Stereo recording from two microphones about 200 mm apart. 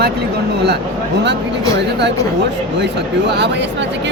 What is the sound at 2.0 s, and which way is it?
Speech, 60° right (ahead or behind).